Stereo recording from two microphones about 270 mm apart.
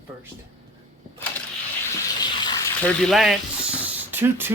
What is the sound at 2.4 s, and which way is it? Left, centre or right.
Mechanisms, centre.